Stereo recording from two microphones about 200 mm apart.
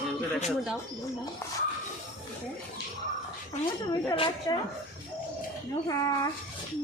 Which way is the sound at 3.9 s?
25° left (ahead or behind).